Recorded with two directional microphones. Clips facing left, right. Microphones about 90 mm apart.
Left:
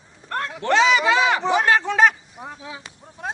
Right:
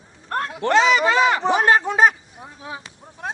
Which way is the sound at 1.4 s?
40° right (ahead or behind).